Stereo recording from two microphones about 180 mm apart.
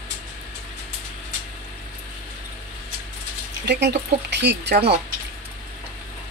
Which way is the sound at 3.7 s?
70° right (ahead or behind).